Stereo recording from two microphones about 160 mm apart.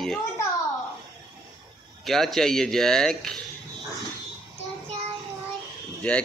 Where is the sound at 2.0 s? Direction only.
Centre (ahead or behind).